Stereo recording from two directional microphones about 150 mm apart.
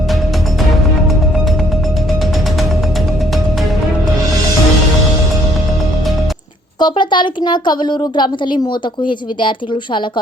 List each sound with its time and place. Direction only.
6.7 s a woman's voice: 30° left (ahead or behind)